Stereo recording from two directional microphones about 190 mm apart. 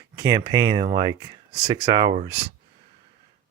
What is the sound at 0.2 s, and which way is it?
Speech, 20° right (ahead or behind).